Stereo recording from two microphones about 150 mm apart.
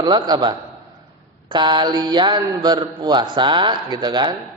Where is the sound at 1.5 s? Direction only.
30° right (ahead or behind).